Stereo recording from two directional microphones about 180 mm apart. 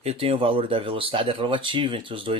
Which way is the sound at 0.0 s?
35° right (ahead or behind).